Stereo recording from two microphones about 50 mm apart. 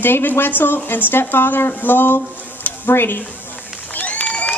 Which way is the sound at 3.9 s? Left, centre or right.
Left.